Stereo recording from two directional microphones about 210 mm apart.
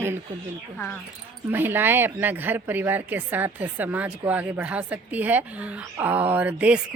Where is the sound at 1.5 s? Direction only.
10° right (ahead or behind).